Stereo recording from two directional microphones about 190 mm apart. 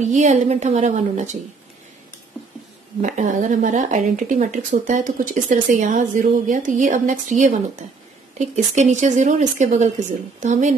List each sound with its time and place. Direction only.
0.1 s speech: 40° right (ahead or behind)
3.0 s speech: 40° right (ahead or behind)